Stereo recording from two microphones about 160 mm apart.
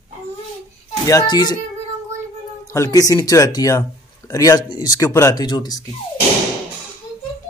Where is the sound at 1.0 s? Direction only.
25° left (ahead or behind).